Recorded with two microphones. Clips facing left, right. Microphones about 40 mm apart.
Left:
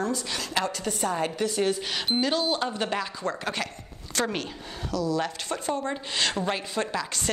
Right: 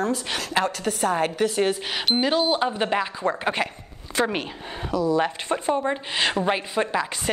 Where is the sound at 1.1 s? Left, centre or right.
Right.